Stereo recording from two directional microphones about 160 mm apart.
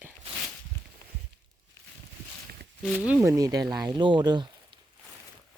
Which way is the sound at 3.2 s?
20° right (ahead or behind).